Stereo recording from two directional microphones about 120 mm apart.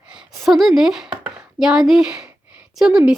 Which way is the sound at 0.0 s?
5° right (ahead or behind).